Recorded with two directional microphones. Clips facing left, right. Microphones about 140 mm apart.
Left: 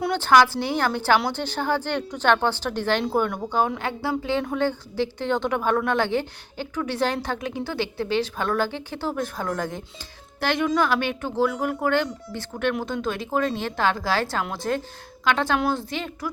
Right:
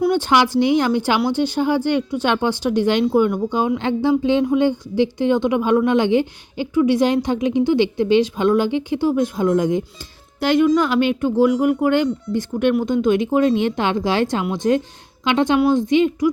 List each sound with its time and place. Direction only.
0.2 s speech: 15° right (ahead or behind)